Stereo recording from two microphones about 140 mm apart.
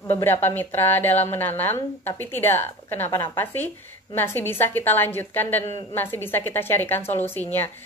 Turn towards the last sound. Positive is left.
turn(degrees=15)  # may be behind; listen again after turning